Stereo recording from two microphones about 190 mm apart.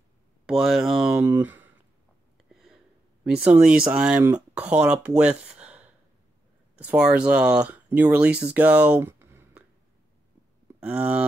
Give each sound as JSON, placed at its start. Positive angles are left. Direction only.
{"t": 0.5, "sound": "speech", "side_deg": 0}
{"t": 2.5, "sound": "a sound", "side_deg": 0}
{"t": 3.3, "sound": "speech", "side_deg": -5}
{"t": 4.2, "sound": "speech", "side_deg": -20}
{"t": 4.6, "sound": "speech", "side_deg": -5}
{"t": 10.8, "sound": "speech", "side_deg": -5}